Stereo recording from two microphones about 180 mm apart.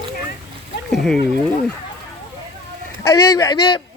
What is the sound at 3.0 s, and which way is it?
Speech, 15° left (ahead or behind).